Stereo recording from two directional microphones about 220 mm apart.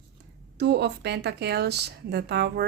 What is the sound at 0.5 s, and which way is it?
Speech, 50° right (ahead or behind).